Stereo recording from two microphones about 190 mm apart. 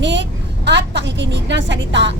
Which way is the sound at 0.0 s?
70° right (ahead or behind).